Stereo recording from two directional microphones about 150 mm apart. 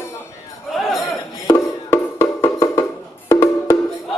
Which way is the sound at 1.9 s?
20° left (ahead or behind).